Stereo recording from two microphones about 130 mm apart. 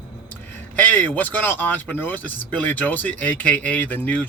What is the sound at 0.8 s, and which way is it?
Speech, 15° left (ahead or behind).